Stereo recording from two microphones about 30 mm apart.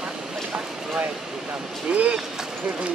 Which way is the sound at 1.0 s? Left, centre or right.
Right.